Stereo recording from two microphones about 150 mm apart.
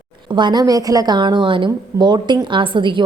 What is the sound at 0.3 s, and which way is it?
A woman's voice, 30° right (ahead or behind).